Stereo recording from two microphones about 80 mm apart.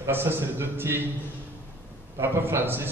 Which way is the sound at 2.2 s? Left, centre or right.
Right.